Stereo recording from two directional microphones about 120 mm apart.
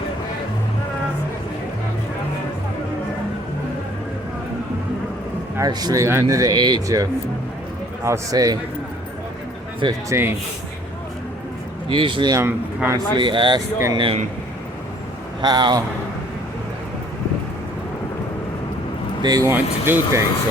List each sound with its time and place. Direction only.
5.5 s a man's voice: 30° right (ahead or behind)
10.1 s speech: 20° right (ahead or behind)
11.9 s speech: 45° right (ahead or behind)
12.3 s speech: 20° right (ahead or behind)
13.1 s a man's voice: 40° right (ahead or behind)
15.4 s a man's voice: 40° right (ahead or behind)
19.2 s a man's voice: 35° right (ahead or behind)
19.5 s speech: 20° right (ahead or behind)